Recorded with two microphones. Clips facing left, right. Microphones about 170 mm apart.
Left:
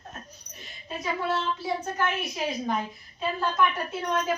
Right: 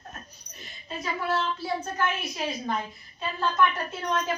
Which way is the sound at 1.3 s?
20° left (ahead or behind).